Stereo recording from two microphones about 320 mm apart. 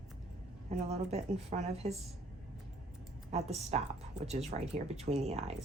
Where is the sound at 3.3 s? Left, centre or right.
Centre.